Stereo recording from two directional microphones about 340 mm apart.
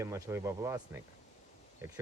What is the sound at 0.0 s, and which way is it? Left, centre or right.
Speech, centre.